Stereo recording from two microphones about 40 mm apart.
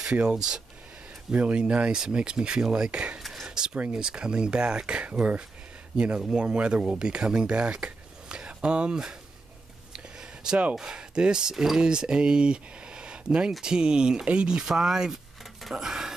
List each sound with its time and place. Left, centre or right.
0.0 s speech: right
1.3 s speech: right
3.2 s whispering: centre
3.4 s a sound: right
3.9 s speech: right
9.9 s a sound: centre
10.8 s speech: right
14.6 s speech: centre
15.7 s a sound: centre